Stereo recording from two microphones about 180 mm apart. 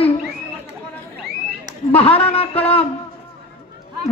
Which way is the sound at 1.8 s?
30° left (ahead or behind).